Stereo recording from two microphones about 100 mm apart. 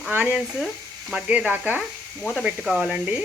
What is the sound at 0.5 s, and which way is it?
Sizzle, centre (ahead or behind).